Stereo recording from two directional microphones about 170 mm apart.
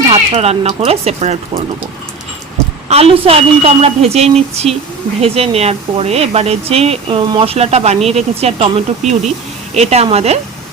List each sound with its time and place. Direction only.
0.1 s speech: 35° right (ahead or behind)
2.9 s speech: 35° right (ahead or behind)